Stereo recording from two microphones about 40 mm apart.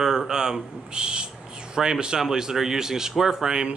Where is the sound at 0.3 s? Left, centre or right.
Centre.